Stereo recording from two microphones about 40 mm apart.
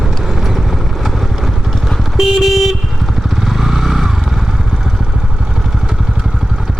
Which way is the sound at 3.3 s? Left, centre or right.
Centre.